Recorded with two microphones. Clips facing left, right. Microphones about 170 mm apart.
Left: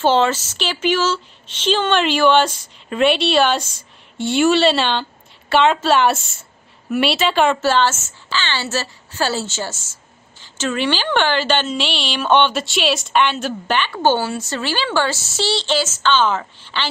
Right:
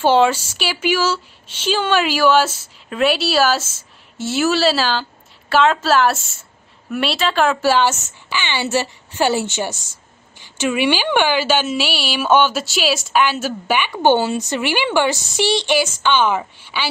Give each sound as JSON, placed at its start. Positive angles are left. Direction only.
{"t": 0.0, "sound": "speech", "side_deg": -10}
{"t": 7.6, "sound": "a woman's voice", "side_deg": -10}